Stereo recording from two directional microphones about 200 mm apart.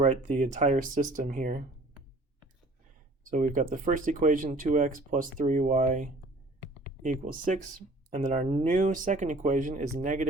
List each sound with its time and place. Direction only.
0.0 s speech: 40° right (ahead or behind)
3.2 s speech: 40° right (ahead or behind)
8.6 s speech: 40° right (ahead or behind)